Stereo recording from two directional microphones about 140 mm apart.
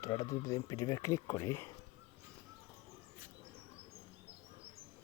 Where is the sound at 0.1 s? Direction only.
25° left (ahead or behind).